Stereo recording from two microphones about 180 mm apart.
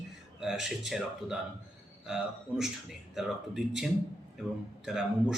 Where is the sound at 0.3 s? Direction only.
5° right (ahead or behind).